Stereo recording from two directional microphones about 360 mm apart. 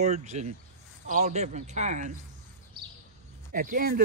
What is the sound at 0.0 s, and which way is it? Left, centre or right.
A man's voice, centre.